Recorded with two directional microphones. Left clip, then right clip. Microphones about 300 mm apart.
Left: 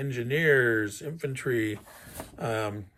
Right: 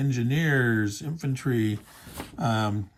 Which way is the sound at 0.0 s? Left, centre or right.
Centre.